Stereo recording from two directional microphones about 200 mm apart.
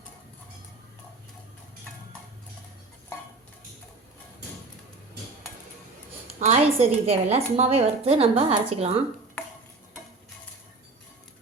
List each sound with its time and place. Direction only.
6.4 s a woman's voice: 30° right (ahead or behind)